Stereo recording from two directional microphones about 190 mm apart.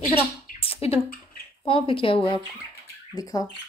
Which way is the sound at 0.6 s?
30° left (ahead or behind).